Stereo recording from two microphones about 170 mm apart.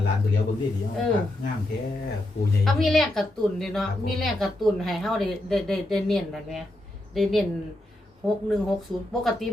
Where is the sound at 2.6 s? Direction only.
Centre (ahead or behind).